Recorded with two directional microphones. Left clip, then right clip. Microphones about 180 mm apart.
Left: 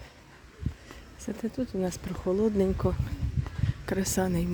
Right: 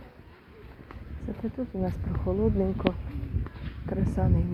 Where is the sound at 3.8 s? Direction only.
90° left.